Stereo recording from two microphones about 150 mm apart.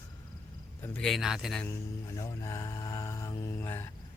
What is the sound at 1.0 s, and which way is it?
Speech, centre (ahead or behind).